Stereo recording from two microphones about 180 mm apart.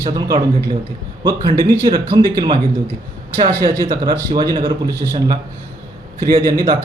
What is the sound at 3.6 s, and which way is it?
A man's voice, 20° right (ahead or behind).